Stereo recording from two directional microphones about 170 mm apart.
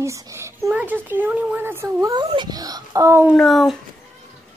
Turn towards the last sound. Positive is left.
turn(degrees=0)  # may be behind; listen again after turning